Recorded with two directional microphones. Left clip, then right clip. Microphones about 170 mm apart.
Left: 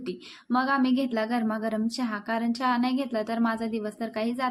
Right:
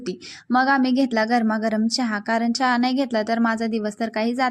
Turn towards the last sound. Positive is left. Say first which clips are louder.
# right 7 dB
turn(degrees=-40)  # may be behind; listen again after turning